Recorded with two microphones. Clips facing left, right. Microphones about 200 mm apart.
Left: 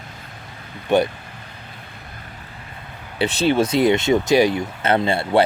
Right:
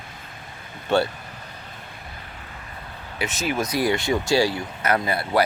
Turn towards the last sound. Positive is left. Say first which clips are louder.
# left 4 dB
turn(degrees=25)  # may be behind; listen again after turning